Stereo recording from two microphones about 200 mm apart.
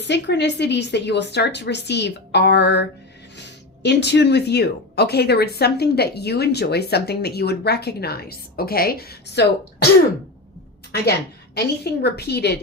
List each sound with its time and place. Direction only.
0.0 s a woman's voice: 60° left (ahead or behind)
3.8 s speech: 60° left (ahead or behind)
11.5 s speech: 55° left (ahead or behind)